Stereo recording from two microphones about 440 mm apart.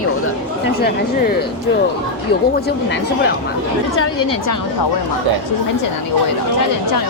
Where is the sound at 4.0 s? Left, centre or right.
Left.